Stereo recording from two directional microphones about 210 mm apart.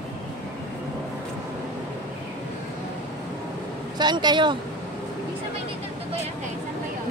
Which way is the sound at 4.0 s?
20° right (ahead or behind).